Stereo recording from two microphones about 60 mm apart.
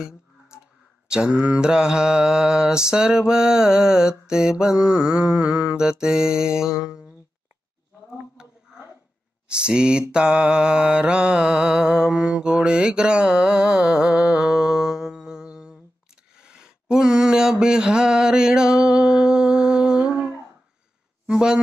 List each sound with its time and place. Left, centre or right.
1.0 s mantra: centre
9.5 s mantra: centre
21.3 s a woman's voice: centre